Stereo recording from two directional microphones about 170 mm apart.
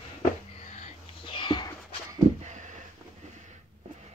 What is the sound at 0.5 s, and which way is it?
Whispering, 35° left (ahead or behind).